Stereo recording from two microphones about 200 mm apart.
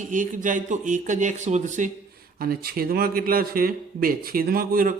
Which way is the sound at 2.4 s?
50° right (ahead or behind).